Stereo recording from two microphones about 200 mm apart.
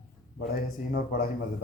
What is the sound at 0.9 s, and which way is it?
Speech, 45° left (ahead or behind).